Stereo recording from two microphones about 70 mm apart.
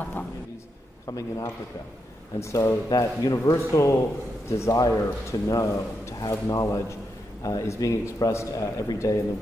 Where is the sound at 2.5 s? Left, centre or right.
Left.